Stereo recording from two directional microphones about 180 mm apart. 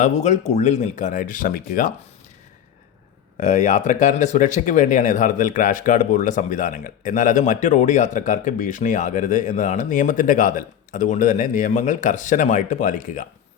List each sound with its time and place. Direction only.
0.0 s speech: 40° left (ahead or behind)
3.4 s speech: 40° left (ahead or behind)